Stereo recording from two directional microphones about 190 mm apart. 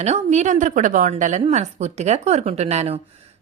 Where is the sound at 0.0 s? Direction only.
35° right (ahead or behind).